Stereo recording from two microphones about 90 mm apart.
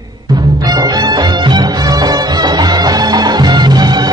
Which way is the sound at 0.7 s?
50° right (ahead or behind).